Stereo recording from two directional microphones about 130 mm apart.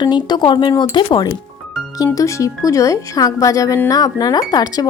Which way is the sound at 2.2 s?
25° left (ahead or behind).